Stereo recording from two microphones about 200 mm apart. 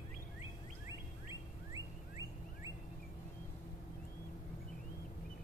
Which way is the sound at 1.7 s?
15° right (ahead or behind).